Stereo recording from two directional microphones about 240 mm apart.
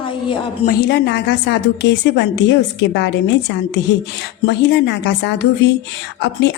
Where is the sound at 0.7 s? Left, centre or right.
Left.